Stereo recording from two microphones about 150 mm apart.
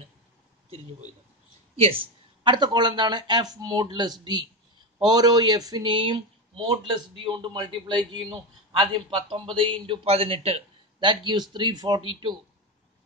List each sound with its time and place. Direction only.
1.8 s speech: 40° right (ahead or behind)